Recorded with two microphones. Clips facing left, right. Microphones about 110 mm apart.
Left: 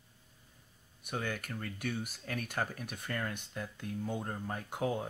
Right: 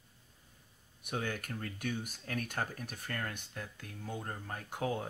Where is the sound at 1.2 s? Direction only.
45° right (ahead or behind).